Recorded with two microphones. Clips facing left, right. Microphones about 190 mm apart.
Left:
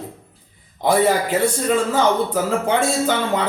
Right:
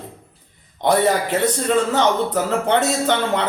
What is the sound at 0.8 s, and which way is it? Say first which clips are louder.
A man's voice: even; 10° left (ahead or behind).